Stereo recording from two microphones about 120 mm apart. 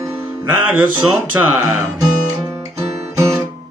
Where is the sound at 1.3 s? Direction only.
15° right (ahead or behind).